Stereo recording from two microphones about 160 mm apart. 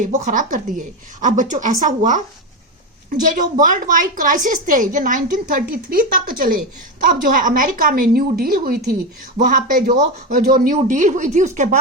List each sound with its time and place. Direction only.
0.0 s a woman's voice: 55° right (ahead or behind)